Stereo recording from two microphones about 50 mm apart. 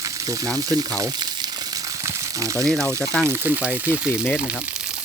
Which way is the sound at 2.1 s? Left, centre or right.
Right.